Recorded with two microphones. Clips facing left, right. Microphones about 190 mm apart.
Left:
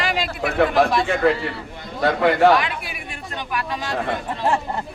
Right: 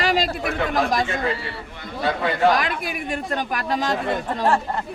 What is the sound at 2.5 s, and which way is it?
A man's voice, 45° right (ahead or behind).